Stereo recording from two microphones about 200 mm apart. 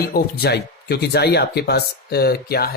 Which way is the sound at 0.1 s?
55° left (ahead or behind).